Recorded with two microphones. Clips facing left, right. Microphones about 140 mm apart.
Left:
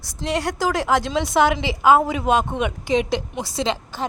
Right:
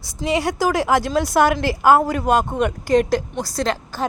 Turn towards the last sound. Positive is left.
turn(degrees=0)  # may be behind; listen again after turning